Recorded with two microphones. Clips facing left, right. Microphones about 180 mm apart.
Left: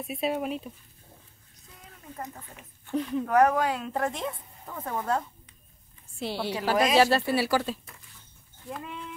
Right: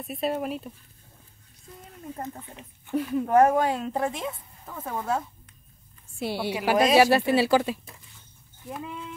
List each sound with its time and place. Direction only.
0.0 s speech: centre (ahead or behind)
2.9 s speech: 5° right (ahead or behind)
3.3 s speech: 25° right (ahead or behind)
4.2 s a woman's voice: centre (ahead or behind); by 7.6 s 20° right (ahead or behind)
7.6 s a woman's voice: 10° right (ahead or behind)